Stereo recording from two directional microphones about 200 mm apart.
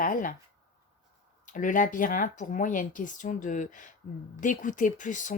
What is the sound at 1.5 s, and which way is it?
Speech, 40° left (ahead or behind).